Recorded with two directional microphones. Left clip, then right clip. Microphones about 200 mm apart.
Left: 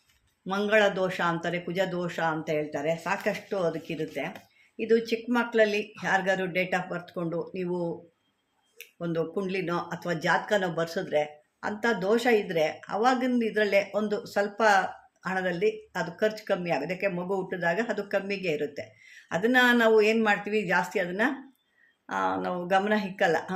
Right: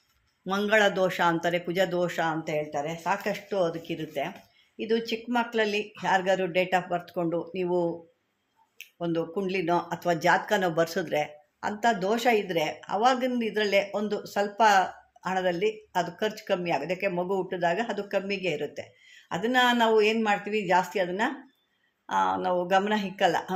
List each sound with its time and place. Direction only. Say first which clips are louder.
0.4 s speech: even; 20° right (ahead or behind)
11.8 s speech: even; 20° right (ahead or behind)